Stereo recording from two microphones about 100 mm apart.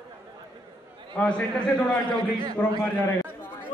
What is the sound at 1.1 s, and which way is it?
Speech, 10° left (ahead or behind).